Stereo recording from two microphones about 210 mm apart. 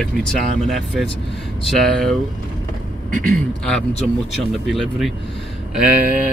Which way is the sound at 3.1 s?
40° right (ahead or behind).